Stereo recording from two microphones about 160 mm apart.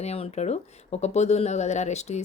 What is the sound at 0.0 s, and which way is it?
Speech, 40° left (ahead or behind).